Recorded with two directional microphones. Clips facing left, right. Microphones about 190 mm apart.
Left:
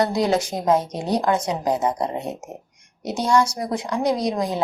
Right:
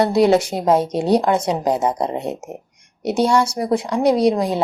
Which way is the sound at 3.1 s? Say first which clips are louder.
Right 3 dB; 25° right (ahead or behind).